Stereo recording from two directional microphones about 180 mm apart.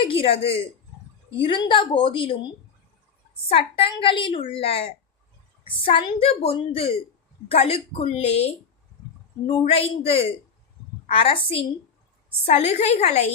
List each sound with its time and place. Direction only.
0.0 s a woman's voice: 30° left (ahead or behind)
3.5 s a woman's voice: 30° left (ahead or behind)